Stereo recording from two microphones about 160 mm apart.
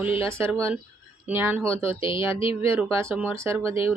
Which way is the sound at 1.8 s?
35° left (ahead or behind).